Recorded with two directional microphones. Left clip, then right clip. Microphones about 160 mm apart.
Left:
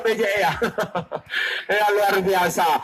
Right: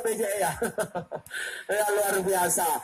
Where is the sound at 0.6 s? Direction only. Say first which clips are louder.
Left 6 dB; 30° right (ahead or behind).